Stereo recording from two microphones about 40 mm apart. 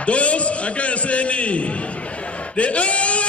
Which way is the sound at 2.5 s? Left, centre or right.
Left.